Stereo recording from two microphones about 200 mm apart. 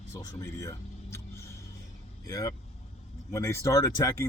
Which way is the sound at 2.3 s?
15° left (ahead or behind).